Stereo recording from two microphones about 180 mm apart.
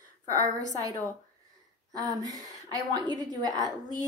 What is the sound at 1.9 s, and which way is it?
A woman's voice, 20° right (ahead or behind).